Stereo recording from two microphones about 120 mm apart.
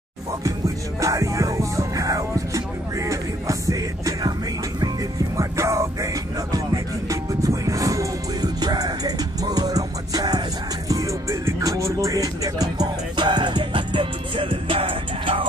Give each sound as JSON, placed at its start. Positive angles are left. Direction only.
{"t": 1.0, "sound": "music", "side_deg": -25}
{"t": 5.4, "sound": "music", "side_deg": -25}